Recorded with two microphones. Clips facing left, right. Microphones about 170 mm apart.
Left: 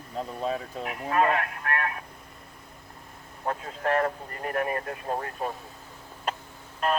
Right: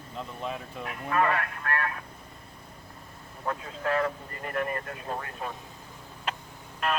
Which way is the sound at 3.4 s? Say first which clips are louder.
Left 2 dB; 45° left (ahead or behind).